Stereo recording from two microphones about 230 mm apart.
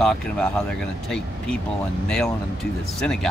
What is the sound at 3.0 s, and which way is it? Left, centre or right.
Speech, centre.